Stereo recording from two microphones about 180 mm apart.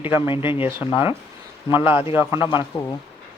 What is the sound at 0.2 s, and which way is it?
Speech, 30° left (ahead or behind).